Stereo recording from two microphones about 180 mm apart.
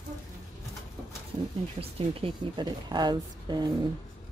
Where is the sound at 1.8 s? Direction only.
30° right (ahead or behind).